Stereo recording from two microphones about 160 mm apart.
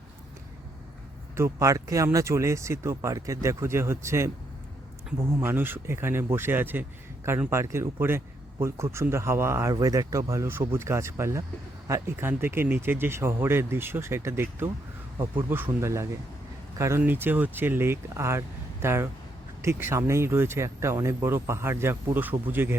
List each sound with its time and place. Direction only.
1.4 s speech: 15° right (ahead or behind)